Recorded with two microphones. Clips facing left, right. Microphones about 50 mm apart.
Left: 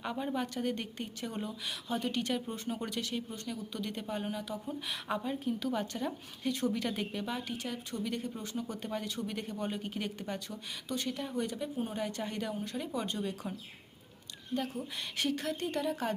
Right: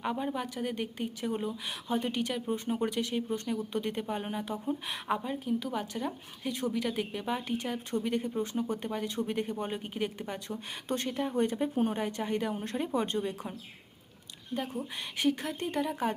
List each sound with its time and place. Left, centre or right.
0.0 s a woman's voice: centre
10.8 s speech: right
11.1 s speech: centre
11.3 s speech: right
12.5 s speech: right
14.5 s a woman's voice: centre